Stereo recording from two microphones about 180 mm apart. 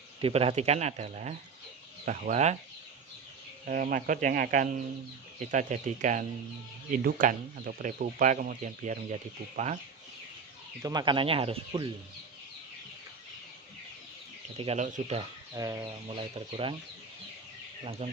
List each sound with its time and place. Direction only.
0.2 s speech: 30° right (ahead or behind)
3.7 s speech: 50° right (ahead or behind)
10.8 s speech: 25° right (ahead or behind)
14.6 s speech: 40° right (ahead or behind)
15.5 s speech: 20° right (ahead or behind)
16.0 s speech: 30° right (ahead or behind)
18.0 s speech: 35° right (ahead or behind)